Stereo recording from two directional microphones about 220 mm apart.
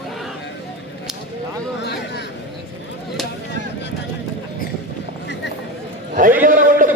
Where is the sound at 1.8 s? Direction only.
50° left (ahead or behind).